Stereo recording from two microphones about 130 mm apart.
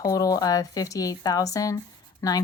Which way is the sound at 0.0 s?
25° left (ahead or behind).